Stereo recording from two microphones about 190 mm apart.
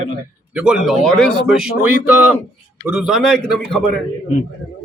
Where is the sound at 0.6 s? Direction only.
5° right (ahead or behind).